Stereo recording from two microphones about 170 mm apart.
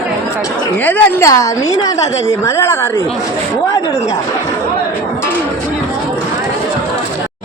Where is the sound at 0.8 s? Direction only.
15° left (ahead or behind).